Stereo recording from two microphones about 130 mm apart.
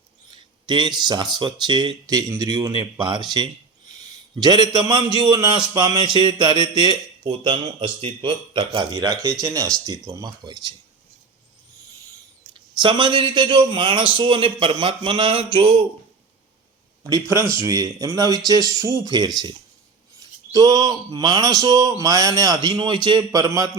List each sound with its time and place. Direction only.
0.3 s speech: 35° right (ahead or behind)
12.5 s speech: 40° right (ahead or behind)
17.0 s speech: 25° right (ahead or behind)
20.5 s speech: 30° right (ahead or behind)